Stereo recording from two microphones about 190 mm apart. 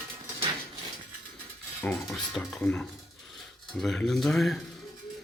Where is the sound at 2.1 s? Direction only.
Centre (ahead or behind).